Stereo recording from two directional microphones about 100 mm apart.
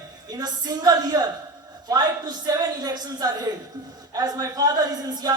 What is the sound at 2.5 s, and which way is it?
Speech, 40° right (ahead or behind).